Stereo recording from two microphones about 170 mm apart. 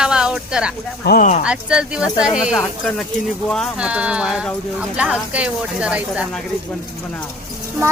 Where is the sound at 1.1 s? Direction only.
50° left (ahead or behind).